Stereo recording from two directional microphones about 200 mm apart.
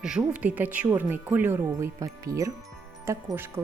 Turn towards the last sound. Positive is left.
turn(degrees=-10)  # may be behind; listen again after turning